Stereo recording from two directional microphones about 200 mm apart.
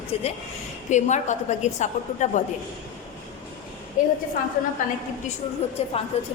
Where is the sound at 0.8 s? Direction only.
35° left (ahead or behind).